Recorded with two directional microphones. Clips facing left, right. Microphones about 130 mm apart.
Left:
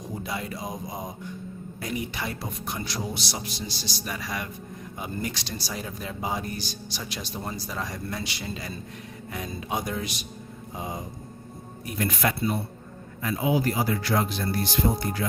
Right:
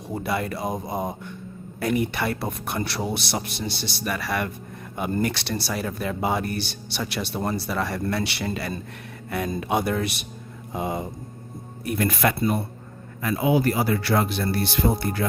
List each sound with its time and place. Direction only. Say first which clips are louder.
0.2 s speech: right 8 dB; 60° right (ahead or behind)
10.8 s mantra: right 7 dB; 70° right (ahead or behind)
11.9 s speech: right 4 dB; 60° right (ahead or behind)
13.2 s speech: right 4 dB; 65° right (ahead or behind)